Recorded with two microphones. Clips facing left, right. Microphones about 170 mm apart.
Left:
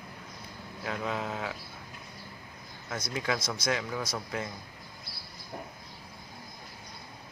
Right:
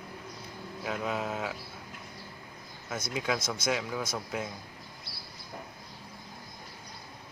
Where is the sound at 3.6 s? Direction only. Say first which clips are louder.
Even; 5° right (ahead or behind).